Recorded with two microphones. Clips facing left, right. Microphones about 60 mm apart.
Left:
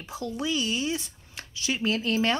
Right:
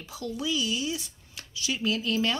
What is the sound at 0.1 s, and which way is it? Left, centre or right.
Speech, left.